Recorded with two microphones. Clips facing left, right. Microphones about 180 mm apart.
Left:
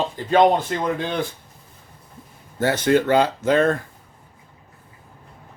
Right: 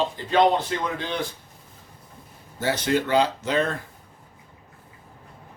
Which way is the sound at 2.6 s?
55° left (ahead or behind).